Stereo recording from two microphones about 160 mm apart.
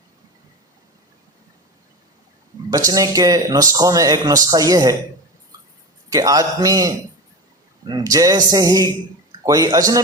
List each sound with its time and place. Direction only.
2.6 s speech: 20° right (ahead or behind)
6.1 s speech: 25° right (ahead or behind)